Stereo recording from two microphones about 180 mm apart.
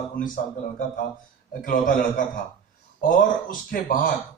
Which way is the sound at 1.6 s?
50° left (ahead or behind).